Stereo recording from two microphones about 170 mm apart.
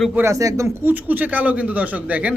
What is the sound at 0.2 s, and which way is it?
A man's voice, 20° right (ahead or behind).